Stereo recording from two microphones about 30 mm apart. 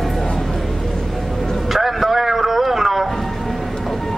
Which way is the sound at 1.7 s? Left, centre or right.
Centre.